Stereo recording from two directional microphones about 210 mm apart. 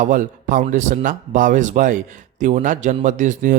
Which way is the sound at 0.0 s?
40° right (ahead or behind).